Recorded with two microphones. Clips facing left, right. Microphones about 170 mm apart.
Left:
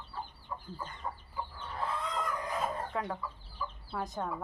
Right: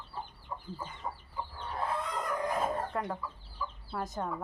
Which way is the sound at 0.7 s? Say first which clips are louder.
Even; 5° right (ahead or behind).